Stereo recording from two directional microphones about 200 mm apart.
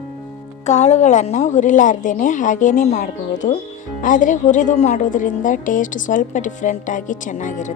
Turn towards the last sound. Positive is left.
turn(degrees=40)  # may be behind; listen again after turning